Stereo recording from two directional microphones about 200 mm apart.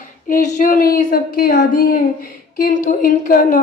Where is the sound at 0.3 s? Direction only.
40° left (ahead or behind).